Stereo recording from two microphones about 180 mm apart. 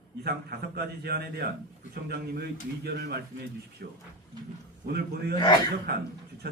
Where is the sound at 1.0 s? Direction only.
60° right (ahead or behind).